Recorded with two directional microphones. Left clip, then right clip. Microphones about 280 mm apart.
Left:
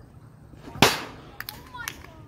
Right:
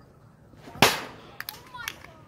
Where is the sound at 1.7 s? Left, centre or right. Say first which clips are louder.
Left 1 dB; right.